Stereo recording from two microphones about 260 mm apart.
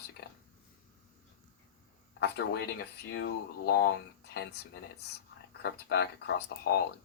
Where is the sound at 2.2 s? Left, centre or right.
Left.